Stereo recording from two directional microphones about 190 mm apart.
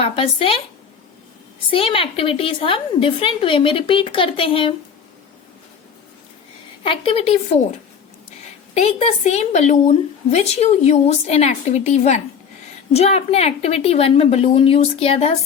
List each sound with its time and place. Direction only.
0.0 s a woman's voice: 30° left (ahead or behind)
1.7 s a woman's voice: 30° left (ahead or behind)
6.8 s a woman's voice: 25° left (ahead or behind)
8.7 s speech: 35° left (ahead or behind)